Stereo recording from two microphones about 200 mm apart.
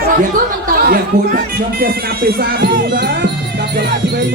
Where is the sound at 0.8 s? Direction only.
50° right (ahead or behind).